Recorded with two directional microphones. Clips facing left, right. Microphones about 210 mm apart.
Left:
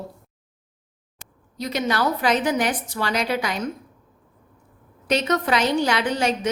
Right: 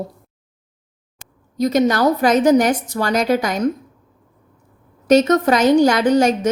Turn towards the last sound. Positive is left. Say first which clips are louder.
# right 8 dB
turn(degrees=-45)  # may be behind; listen again after turning